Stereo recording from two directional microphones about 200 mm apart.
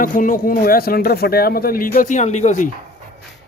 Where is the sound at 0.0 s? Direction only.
40° left (ahead or behind).